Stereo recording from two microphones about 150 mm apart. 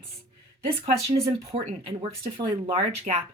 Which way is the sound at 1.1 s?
40° right (ahead or behind).